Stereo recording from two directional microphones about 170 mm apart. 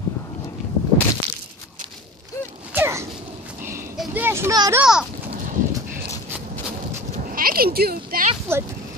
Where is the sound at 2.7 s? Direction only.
15° right (ahead or behind).